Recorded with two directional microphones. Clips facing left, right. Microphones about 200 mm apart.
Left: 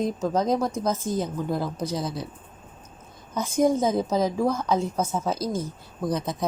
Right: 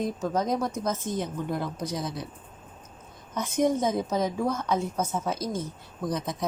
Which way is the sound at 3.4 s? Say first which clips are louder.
Left 3 dB; 30° left (ahead or behind).